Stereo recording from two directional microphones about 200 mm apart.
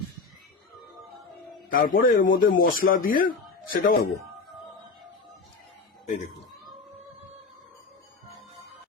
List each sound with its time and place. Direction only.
1.7 s a man's voice: 45° left (ahead or behind)